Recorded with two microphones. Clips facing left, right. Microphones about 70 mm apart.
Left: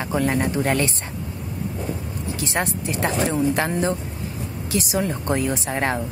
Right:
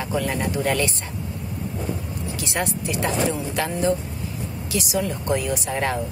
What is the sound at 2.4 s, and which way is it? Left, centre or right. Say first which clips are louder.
A woman's voice: left 1 dB; left.